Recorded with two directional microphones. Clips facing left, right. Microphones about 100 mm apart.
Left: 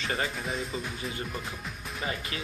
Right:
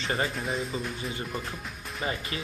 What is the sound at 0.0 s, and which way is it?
Speech, 30° right (ahead or behind).